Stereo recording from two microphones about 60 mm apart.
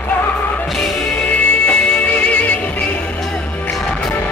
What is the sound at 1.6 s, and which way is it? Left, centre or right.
Music, left.